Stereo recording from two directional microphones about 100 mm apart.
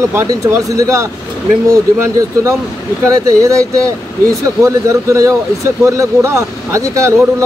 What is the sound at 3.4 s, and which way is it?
Speech, 35° right (ahead or behind).